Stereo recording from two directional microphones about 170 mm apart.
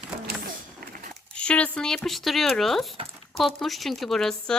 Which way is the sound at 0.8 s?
60° right (ahead or behind).